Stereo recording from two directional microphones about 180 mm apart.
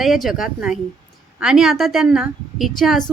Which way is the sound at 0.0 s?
Centre (ahead or behind).